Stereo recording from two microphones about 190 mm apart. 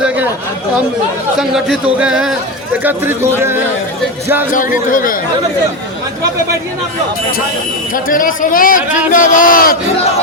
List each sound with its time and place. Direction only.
1.4 s speech: centre (ahead or behind)
4.9 s speech: 45° left (ahead or behind)
7.9 s speech: 45° left (ahead or behind)